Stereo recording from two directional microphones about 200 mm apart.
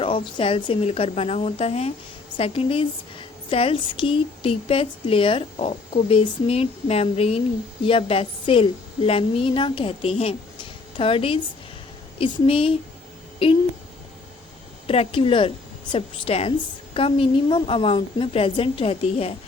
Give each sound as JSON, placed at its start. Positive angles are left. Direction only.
{"t": 0.0, "sound": "a woman's voice", "side_deg": 25}
{"t": 14.8, "sound": "a woman's voice", "side_deg": 30}